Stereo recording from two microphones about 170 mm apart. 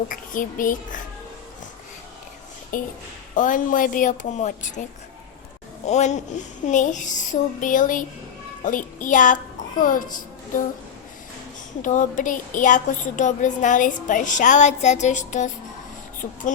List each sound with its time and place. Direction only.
0.1 s a woman's voice: 55° left (ahead or behind)
2.7 s a woman's voice: 55° left (ahead or behind)
5.8 s a woman's voice: 40° left (ahead or behind)
11.8 s a woman's voice: 50° left (ahead or behind)
16.2 s a sound: 40° left (ahead or behind)